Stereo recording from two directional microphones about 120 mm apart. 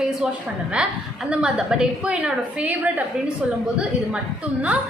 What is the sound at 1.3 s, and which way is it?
A woman's voice, 5° right (ahead or behind).